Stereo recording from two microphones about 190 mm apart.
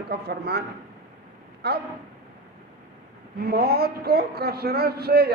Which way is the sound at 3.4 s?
55° right (ahead or behind).